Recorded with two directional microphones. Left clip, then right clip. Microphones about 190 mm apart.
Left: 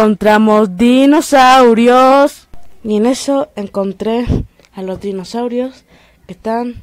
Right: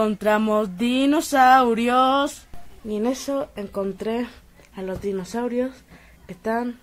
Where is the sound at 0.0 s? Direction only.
45° left (ahead or behind).